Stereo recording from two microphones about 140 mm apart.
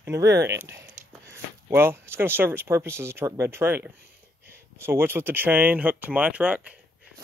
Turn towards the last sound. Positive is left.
turn(degrees=-10)  # may be behind; listen again after turning